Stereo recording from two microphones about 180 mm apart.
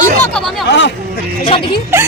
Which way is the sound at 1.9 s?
15° right (ahead or behind).